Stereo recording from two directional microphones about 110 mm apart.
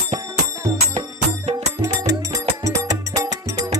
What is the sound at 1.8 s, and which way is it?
Music, 30° right (ahead or behind).